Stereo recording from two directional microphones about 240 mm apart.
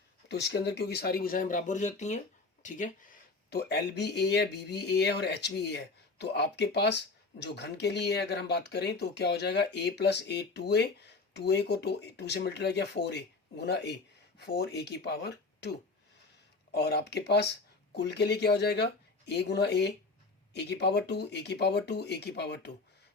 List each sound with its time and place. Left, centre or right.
0.3 s speech: left
16.7 s speech: left